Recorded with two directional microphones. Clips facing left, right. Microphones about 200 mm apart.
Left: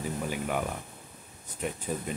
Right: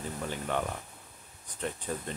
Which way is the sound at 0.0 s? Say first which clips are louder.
Left 4 dB; 10° left (ahead or behind).